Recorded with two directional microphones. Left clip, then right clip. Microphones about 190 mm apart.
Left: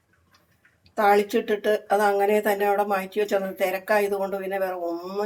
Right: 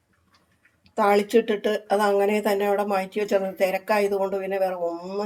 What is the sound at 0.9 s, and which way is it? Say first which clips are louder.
Speech: even; 20° right (ahead or behind).